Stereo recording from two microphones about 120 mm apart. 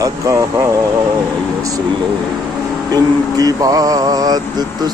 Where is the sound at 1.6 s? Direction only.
30° right (ahead or behind).